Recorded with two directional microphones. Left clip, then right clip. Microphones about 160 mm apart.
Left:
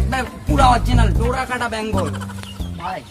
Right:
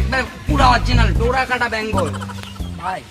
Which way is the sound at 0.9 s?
25° left (ahead or behind).